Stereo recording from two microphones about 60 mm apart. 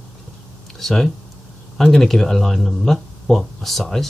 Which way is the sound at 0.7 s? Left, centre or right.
Centre.